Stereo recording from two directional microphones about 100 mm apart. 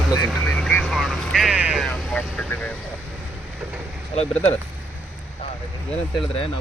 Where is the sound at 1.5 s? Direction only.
10° right (ahead or behind).